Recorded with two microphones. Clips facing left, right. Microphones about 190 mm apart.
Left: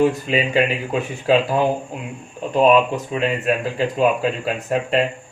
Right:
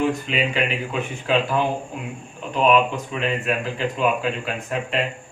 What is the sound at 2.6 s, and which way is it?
Speech, 35° left (ahead or behind).